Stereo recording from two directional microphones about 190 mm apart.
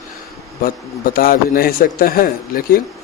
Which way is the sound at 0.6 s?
50° left (ahead or behind).